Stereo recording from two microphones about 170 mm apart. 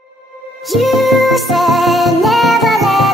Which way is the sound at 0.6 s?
Centre (ahead or behind).